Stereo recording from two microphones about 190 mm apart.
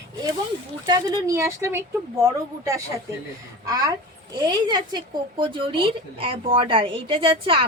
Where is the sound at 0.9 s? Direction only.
20° right (ahead or behind).